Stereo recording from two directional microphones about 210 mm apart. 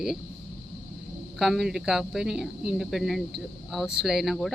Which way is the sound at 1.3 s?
Centre (ahead or behind).